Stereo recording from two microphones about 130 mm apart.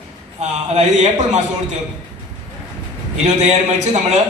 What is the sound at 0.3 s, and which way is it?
A man's voice, 60° right (ahead or behind).